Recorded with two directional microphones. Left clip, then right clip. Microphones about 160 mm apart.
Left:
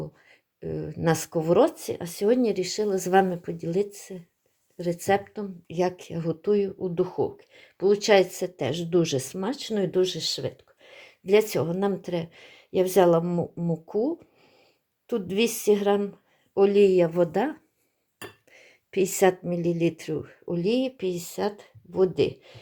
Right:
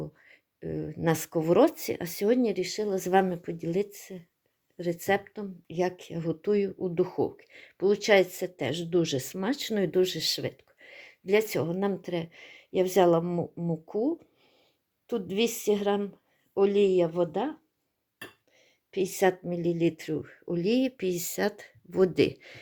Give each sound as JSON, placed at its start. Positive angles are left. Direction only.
{"t": 0.0, "sound": "speech", "side_deg": -20}
{"t": 2.3, "sound": "speech", "side_deg": -20}
{"t": 6.4, "sound": "speech", "side_deg": -25}
{"t": 9.4, "sound": "speech", "side_deg": -30}
{"t": 10.8, "sound": "speech", "side_deg": -15}
{"t": 18.5, "sound": "speech", "side_deg": 20}